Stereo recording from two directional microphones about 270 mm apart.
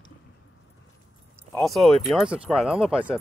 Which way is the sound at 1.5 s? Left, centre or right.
Centre.